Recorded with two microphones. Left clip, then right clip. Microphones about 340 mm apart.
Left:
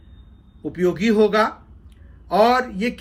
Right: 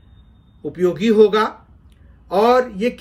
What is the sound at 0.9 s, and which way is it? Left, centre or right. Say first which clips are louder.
A man's voice: right 4 dB; centre.